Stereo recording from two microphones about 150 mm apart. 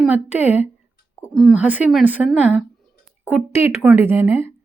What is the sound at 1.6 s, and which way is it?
Speech, 10° right (ahead or behind).